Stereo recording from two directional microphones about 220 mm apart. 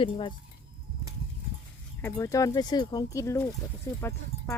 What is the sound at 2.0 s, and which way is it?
Speech, 15° left (ahead or behind).